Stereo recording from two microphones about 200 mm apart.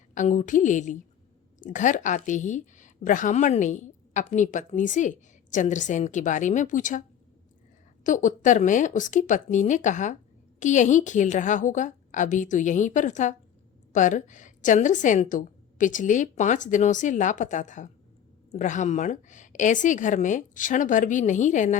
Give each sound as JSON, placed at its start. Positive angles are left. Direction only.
{"t": 0.1, "sound": "a woman's voice", "side_deg": 40}
{"t": 8.0, "sound": "a woman's voice", "side_deg": 40}